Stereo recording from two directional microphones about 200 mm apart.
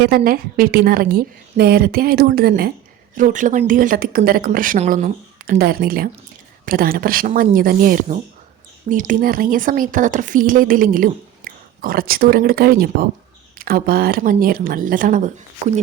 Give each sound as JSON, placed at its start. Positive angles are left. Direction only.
{"t": 0.3, "sound": "speech", "side_deg": -45}